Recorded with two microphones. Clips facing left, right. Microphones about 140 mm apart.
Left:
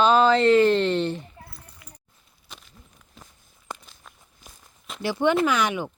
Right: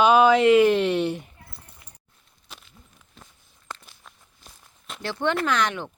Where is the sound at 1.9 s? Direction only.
25° right (ahead or behind).